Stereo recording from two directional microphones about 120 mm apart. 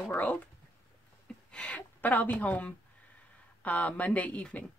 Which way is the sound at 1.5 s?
10° left (ahead or behind).